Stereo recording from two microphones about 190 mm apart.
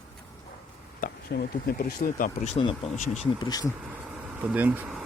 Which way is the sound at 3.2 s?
20° left (ahead or behind).